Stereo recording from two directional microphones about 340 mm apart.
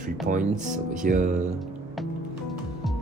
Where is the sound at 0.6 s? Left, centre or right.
Right.